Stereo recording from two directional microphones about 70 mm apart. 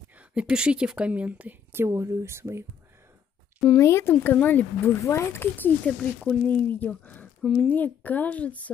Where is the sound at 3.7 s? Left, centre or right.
Left.